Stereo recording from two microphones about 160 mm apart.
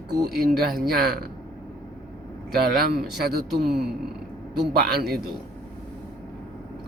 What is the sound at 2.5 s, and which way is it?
A man's voice, 80° right.